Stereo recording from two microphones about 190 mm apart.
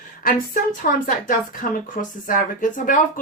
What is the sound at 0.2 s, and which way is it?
Speech, 45° left (ahead or behind).